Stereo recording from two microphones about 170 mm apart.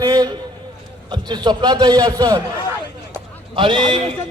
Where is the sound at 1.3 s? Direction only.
25° right (ahead or behind).